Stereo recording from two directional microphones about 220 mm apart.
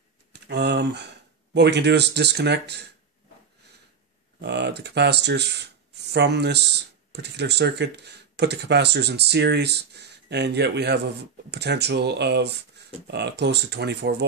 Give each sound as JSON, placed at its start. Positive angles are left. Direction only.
{"t": 0.3, "sound": "speech", "side_deg": -50}
{"t": 4.4, "sound": "speech", "side_deg": -50}